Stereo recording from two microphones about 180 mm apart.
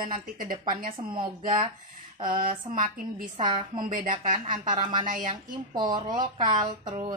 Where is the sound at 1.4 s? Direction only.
50° right (ahead or behind).